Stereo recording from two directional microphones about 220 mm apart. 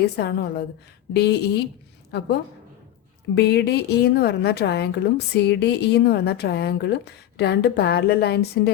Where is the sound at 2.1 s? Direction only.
50° left (ahead or behind).